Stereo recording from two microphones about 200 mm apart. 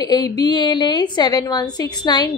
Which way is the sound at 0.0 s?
20° left (ahead or behind).